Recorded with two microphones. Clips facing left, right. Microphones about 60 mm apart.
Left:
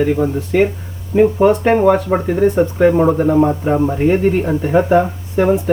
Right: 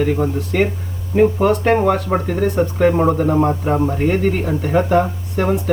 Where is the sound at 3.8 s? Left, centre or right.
Centre.